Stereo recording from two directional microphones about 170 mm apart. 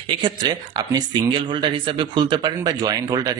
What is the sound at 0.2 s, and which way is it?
Speech, 25° right (ahead or behind).